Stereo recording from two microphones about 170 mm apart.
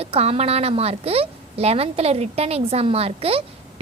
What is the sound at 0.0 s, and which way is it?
A woman's voice, 35° right (ahead or behind).